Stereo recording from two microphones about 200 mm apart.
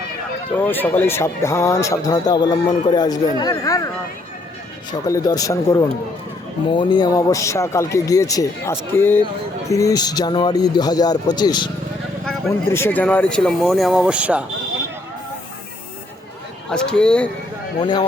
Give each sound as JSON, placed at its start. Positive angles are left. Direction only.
{"t": 0.5, "sound": "a man's voice", "side_deg": 10}
{"t": 5.0, "sound": "a man's voice", "side_deg": 15}
{"t": 16.6, "sound": "speech", "side_deg": 5}
{"t": 17.7, "sound": "a man's voice", "side_deg": 20}